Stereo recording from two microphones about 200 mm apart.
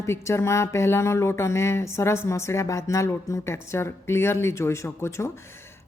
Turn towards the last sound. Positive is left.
turn(degrees=10)  # may be behind; listen again after turning